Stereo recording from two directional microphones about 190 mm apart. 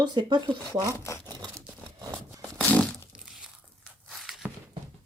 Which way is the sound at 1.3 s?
20° right (ahead or behind).